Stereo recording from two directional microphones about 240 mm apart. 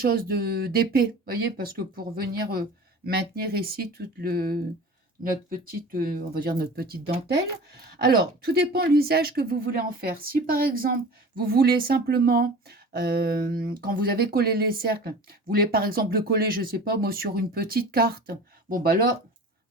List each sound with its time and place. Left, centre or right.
0.0 s speech: right